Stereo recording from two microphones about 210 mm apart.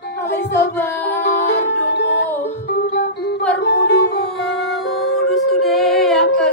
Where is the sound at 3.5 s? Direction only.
55° left (ahead or behind).